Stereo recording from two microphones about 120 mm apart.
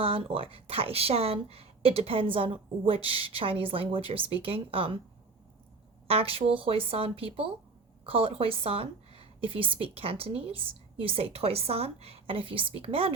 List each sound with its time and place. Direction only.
0.0 s a woman's voice: 50° right (ahead or behind)
6.1 s a woman's voice: 50° right (ahead or behind)